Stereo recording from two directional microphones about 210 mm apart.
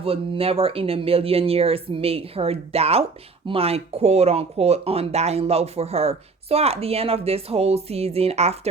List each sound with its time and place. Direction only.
0.0 s speech: 25° right (ahead or behind)